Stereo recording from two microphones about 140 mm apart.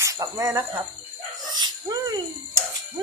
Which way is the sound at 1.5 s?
30° right (ahead or behind).